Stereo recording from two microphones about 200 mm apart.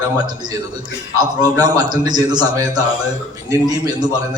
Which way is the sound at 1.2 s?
20° right (ahead or behind).